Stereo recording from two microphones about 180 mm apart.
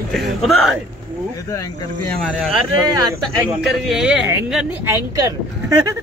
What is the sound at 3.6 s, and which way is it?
Speech, centre (ahead or behind).